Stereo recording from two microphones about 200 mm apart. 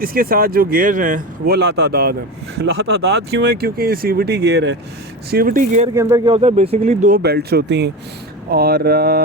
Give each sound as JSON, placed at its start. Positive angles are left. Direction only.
{"t": 0.0, "sound": "speech", "side_deg": -45}
{"t": 5.3, "sound": "speech", "side_deg": -45}
{"t": 5.9, "sound": "speech", "side_deg": -15}
{"t": 6.4, "sound": "speech", "side_deg": -30}
{"t": 7.2, "sound": "speech", "side_deg": -55}